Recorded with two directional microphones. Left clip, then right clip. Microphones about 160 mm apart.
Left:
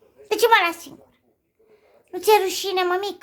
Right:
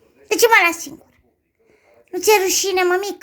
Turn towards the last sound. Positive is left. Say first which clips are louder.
# right 4 dB
turn(degrees=-20)  # may be behind; listen again after turning